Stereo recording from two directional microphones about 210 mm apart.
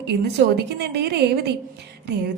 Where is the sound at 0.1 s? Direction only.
50° right (ahead or behind).